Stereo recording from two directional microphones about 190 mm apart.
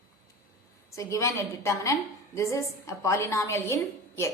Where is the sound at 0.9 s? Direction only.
15° left (ahead or behind).